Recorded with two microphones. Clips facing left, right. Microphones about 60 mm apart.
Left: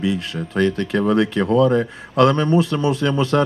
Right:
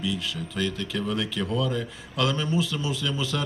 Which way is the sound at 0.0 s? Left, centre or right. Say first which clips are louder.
Left 7 dB; left.